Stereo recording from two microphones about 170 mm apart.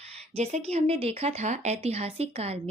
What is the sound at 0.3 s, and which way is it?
A woman's voice, 40° right (ahead or behind).